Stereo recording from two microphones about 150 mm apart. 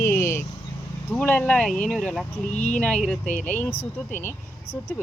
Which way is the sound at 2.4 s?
50° left (ahead or behind).